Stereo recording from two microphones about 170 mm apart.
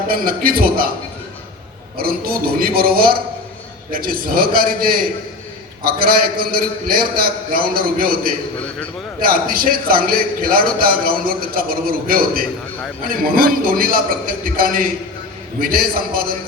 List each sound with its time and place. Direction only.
0.1 s a man's voice: 55° right (ahead or behind)
2.0 s a man's voice: 60° right (ahead or behind)